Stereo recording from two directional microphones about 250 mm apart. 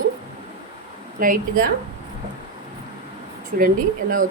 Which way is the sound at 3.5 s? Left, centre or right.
Right.